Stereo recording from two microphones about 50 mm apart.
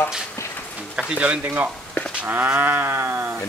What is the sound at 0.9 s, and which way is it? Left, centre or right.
Speech, right.